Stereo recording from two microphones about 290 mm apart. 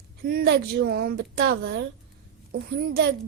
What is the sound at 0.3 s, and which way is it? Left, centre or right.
A woman's voice, right.